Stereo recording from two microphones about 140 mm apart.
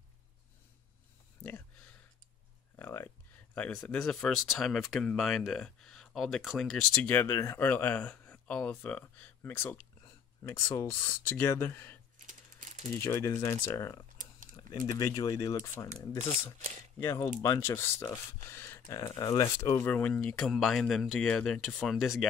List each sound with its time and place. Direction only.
2.8 s a sound: 15° left (ahead or behind)
3.5 s speech: 10° left (ahead or behind)
12.3 s typing: 60° right (ahead or behind)
12.9 s speech: 20° left (ahead or behind)
15.0 s speech: 25° left (ahead or behind)
17.0 s speech: 15° left (ahead or behind)